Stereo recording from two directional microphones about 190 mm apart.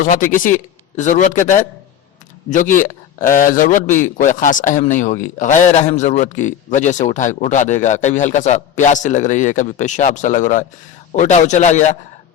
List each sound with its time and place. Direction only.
0.3 s a man's voice: 45° left (ahead or behind)